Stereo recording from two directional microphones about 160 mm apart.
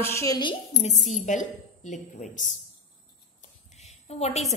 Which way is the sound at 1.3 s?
50° left (ahead or behind).